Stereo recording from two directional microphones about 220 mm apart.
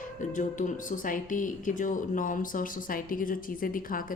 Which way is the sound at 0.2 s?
35° left (ahead or behind).